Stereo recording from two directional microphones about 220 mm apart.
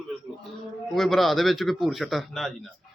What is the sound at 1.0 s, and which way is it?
Speech, centre (ahead or behind).